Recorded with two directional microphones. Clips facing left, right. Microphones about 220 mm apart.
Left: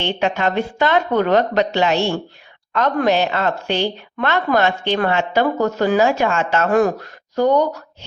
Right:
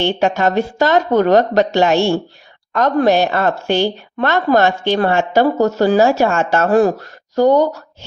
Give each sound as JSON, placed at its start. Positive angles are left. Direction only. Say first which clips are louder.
{"t": 0.0, "sound": "a woman's voice", "louder": "right 4 dB", "side_deg": -40}